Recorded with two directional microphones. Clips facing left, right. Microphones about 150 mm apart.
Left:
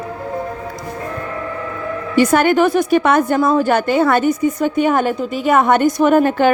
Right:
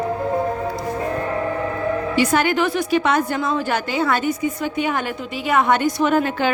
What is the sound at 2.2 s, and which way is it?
A woman's voice, 50° left (ahead or behind).